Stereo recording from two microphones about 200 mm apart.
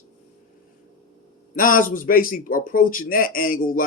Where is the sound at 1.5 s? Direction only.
45° left (ahead or behind).